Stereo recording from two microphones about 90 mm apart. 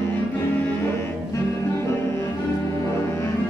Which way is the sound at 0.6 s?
25° left (ahead or behind).